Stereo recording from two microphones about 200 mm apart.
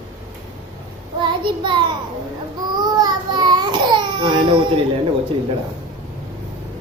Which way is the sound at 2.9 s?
20° right (ahead or behind).